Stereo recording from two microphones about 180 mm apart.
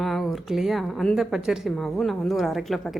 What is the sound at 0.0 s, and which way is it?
A woman's voice, centre (ahead or behind).